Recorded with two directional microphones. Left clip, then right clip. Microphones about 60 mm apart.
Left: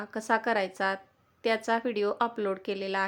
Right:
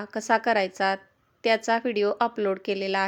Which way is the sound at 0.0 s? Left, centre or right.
Right.